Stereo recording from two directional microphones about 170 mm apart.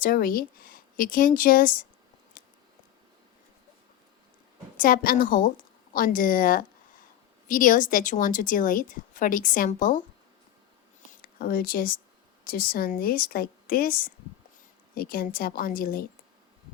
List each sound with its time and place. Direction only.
0.0 s speech: 55° left (ahead or behind)
2.4 s a sound: 55° left (ahead or behind)
4.8 s a woman's voice: 55° left (ahead or behind)
11.2 s speech: 60° left (ahead or behind)